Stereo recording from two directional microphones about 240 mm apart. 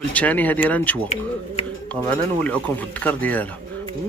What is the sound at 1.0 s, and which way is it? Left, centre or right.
Speech, left.